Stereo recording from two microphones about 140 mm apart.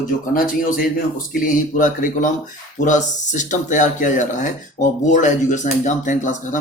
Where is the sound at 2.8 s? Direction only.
60° left (ahead or behind).